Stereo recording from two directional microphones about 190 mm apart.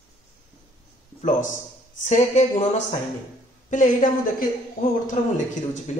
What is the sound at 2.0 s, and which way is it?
A woman's voice, 35° left (ahead or behind).